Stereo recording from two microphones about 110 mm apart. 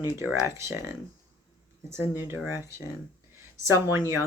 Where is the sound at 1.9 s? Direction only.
20° right (ahead or behind).